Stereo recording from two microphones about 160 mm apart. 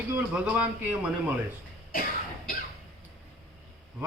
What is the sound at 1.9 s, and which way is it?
Cough, 65° left (ahead or behind).